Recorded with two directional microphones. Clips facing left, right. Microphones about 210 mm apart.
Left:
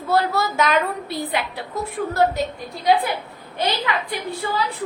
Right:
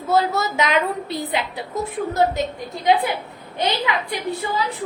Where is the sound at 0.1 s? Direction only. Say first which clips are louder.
Right 1 dB; 20° right (ahead or behind).